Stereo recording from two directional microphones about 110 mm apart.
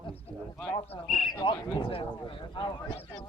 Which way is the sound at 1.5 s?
50° left (ahead or behind).